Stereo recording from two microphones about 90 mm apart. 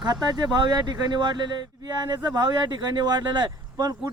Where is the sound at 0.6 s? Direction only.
50° right (ahead or behind).